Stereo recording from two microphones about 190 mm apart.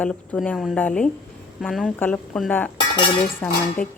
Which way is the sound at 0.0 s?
5° left (ahead or behind).